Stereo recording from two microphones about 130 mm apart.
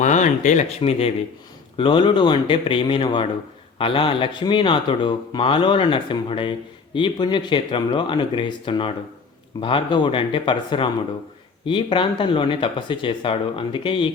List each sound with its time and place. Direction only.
0.0 s speech: 70° left (ahead or behind)
0.8 s speech: 50° left (ahead or behind)